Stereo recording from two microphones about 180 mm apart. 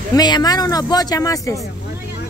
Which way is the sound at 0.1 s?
20° left (ahead or behind).